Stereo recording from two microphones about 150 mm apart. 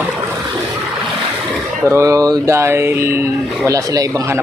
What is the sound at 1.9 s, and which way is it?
Speech, 20° right (ahead or behind).